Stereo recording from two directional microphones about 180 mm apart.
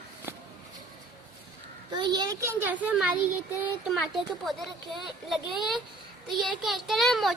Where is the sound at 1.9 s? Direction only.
25° right (ahead or behind).